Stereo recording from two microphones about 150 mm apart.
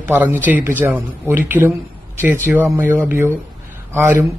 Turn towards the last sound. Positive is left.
turn(degrees=-15)  # may be behind; listen again after turning